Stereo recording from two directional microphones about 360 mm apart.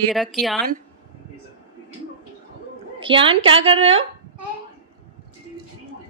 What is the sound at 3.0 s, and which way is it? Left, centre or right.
A woman's voice, centre.